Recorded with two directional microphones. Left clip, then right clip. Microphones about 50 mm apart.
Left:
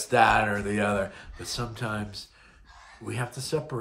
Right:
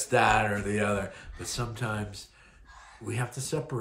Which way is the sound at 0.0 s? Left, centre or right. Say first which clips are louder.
Left 3 dB; left.